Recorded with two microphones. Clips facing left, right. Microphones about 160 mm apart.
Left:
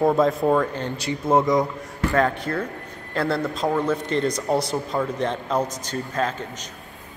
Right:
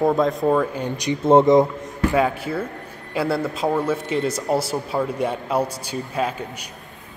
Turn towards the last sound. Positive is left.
turn(degrees=-10)  # may be behind; listen again after turning